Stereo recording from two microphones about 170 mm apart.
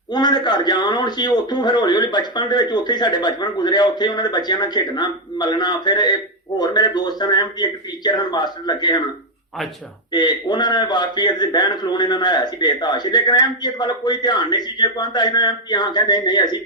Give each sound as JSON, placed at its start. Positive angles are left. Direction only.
{"t": 0.1, "sound": "a man's voice", "side_deg": 25}
{"t": 10.1, "sound": "a man's voice", "side_deg": 25}